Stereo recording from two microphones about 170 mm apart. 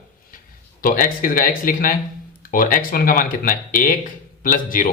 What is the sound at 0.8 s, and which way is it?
Speech, 55° left (ahead or behind).